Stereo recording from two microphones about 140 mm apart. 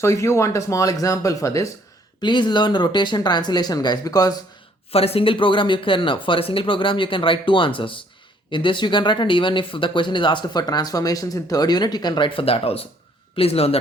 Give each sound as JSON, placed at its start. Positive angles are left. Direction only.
{"t": 0.0, "sound": "speech", "side_deg": 20}
{"t": 2.2, "sound": "speech", "side_deg": 35}
{"t": 4.9, "sound": "speech", "side_deg": 45}